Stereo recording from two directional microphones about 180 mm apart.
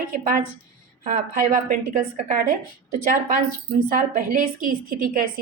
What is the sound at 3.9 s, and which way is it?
A woman's voice, 50° right (ahead or behind).